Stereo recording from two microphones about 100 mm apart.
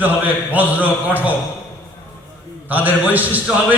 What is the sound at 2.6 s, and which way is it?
Speech, 15° right (ahead or behind).